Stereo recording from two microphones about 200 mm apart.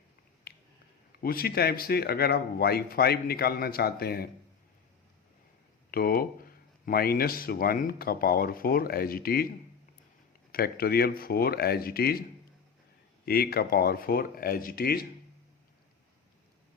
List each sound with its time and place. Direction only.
0.5 s a sound: 50° left (ahead or behind)
1.2 s speech: 50° left (ahead or behind)
5.9 s speech: 50° left (ahead or behind)
10.5 s speech: 50° left (ahead or behind)
13.2 s speech: 50° left (ahead or behind)